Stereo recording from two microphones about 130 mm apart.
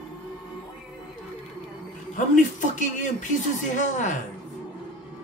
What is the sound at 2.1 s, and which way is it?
Speech, 75° left (ahead or behind).